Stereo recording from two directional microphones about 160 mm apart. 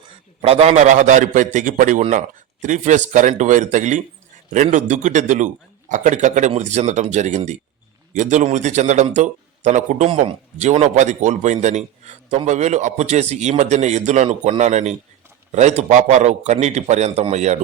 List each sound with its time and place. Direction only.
0.4 s a man's voice: 40° right (ahead or behind)